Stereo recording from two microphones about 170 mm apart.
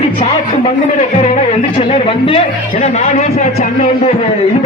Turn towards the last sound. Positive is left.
turn(degrees=40)  # may be behind; listen again after turning